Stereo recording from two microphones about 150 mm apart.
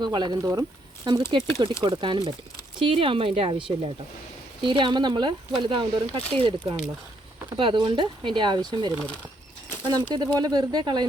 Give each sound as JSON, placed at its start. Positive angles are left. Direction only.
{"t": 0.0, "sound": "speech", "side_deg": -30}
{"t": 9.9, "sound": "speech", "side_deg": -25}